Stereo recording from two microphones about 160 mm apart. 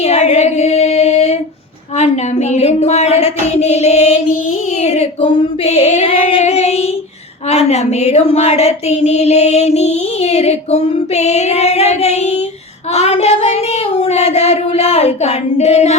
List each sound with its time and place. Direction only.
0.0 s female singing: 40° left (ahead or behind)
2.0 s speech: 45° left (ahead or behind)
4.8 s female singing: 40° left (ahead or behind)
7.5 s speech: 45° left (ahead or behind)